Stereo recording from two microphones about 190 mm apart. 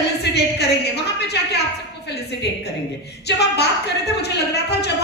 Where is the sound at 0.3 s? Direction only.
65° left (ahead or behind).